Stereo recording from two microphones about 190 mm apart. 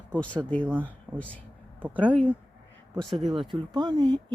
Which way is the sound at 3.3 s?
25° right (ahead or behind).